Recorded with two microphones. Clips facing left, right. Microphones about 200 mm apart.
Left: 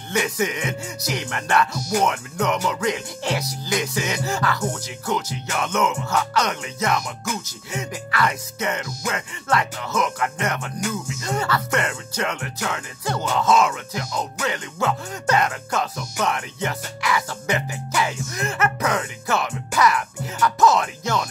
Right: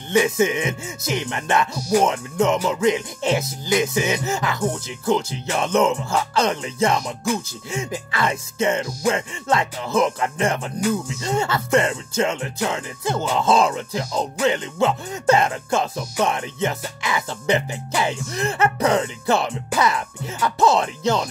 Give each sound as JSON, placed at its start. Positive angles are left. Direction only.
{"t": 0.1, "sound": "speech", "side_deg": -25}